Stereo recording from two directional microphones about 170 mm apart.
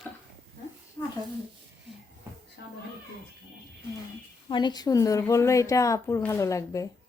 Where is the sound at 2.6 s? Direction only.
75° left (ahead or behind).